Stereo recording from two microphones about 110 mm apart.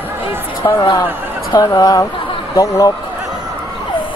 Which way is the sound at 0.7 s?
35° left (ahead or behind).